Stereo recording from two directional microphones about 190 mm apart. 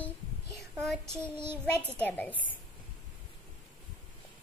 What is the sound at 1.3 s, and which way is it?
Child singing, 10° right (ahead or behind).